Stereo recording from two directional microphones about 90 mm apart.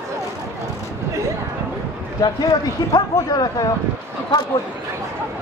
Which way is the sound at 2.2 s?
45° left (ahead or behind).